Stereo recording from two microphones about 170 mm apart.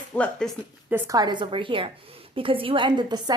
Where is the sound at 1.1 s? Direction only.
25° right (ahead or behind).